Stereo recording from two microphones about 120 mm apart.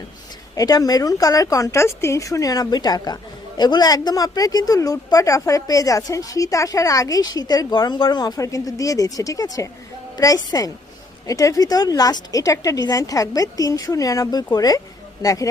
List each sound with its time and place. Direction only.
0.5 s a woman's voice: 30° left (ahead or behind)